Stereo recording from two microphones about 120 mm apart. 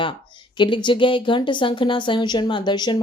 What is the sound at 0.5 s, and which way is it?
A woman's voice, 40° left (ahead or behind).